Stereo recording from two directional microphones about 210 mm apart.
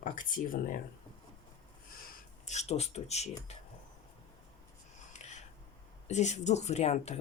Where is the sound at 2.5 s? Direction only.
30° left (ahead or behind).